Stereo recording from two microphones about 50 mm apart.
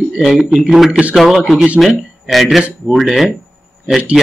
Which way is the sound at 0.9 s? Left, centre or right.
Right.